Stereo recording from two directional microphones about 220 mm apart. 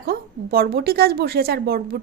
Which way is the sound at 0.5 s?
45° right (ahead or behind).